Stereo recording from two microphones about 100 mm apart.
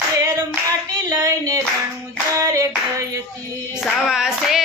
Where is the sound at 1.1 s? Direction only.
35° right (ahead or behind).